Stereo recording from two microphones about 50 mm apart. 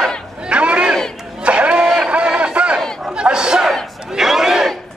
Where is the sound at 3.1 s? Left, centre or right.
Centre.